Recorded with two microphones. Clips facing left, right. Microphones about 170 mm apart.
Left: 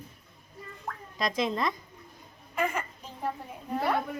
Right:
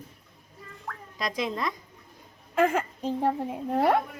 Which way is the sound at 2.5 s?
90° right.